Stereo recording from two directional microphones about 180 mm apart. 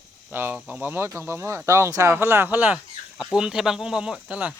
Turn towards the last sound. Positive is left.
turn(degrees=-5)  # may be behind; listen again after turning